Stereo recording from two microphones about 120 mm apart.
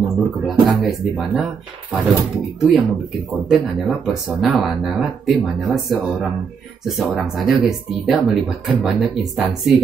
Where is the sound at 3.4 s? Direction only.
Centre (ahead or behind).